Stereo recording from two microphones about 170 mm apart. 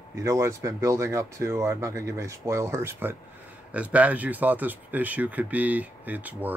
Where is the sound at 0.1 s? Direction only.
15° right (ahead or behind).